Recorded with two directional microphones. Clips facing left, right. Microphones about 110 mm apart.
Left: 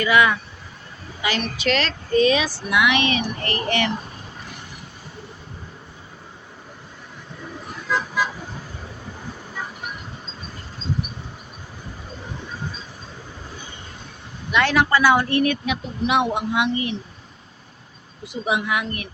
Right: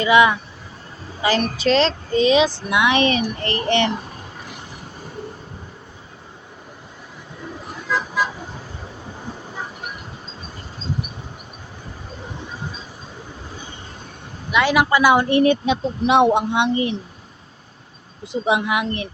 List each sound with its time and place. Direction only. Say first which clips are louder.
0.0 s speech: right 3 dB; 20° right (ahead or behind)
1.2 s speech: right 5 dB; 35° right (ahead or behind)
14.5 s speech: right 2 dB; 10° right (ahead or behind); by 16.9 s 30° right (ahead or behind)
18.3 s speech: right 4 dB; 25° right (ahead or behind)